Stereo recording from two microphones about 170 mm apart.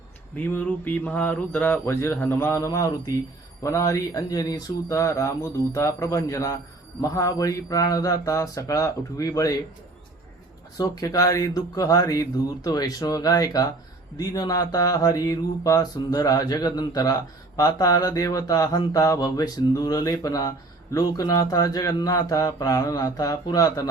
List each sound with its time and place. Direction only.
0.3 s speech: 10° left (ahead or behind)
3.6 s mantra: 20° left (ahead or behind)
10.8 s mantra: 20° left (ahead or behind)